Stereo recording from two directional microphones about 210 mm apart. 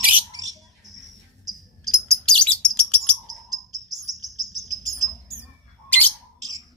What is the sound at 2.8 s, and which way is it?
Bird, 5° left (ahead or behind).